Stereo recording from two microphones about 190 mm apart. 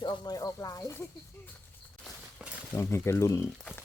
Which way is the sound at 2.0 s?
5° right (ahead or behind).